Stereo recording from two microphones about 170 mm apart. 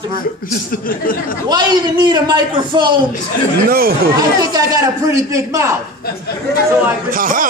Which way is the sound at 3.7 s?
60° right (ahead or behind).